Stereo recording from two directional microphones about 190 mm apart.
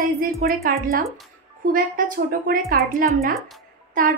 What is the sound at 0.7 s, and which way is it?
A woman's voice, 55° right (ahead or behind).